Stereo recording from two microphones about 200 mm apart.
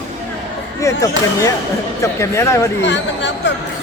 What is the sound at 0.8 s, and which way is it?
Speech, 15° left (ahead or behind).